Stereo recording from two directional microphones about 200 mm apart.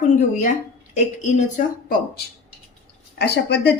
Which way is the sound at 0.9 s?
35° left (ahead or behind).